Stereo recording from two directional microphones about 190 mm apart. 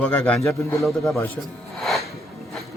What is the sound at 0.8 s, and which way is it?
Speech, centre (ahead or behind).